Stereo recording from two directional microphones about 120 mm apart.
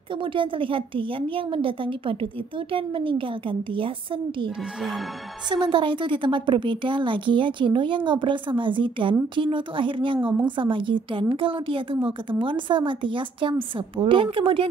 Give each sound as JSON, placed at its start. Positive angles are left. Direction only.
{"t": 0.2, "sound": "a woman's voice", "side_deg": -45}
{"t": 5.5, "sound": "a woman's voice", "side_deg": -40}